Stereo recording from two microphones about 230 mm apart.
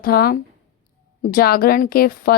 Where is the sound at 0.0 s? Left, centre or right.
Left.